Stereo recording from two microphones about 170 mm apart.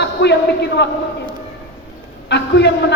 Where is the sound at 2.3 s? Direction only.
90° left.